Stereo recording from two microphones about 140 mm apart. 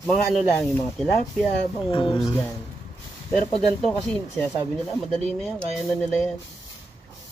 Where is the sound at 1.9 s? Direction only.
40° left (ahead or behind).